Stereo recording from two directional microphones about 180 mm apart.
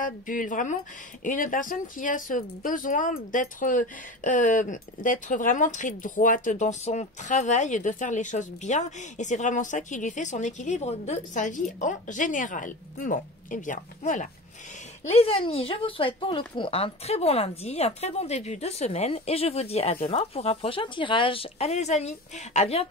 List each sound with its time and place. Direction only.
0.0 s speech: 45° left (ahead or behind)
15.0 s speech: 30° left (ahead or behind)